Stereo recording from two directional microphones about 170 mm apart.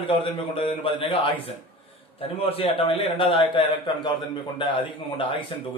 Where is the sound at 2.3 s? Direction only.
35° left (ahead or behind).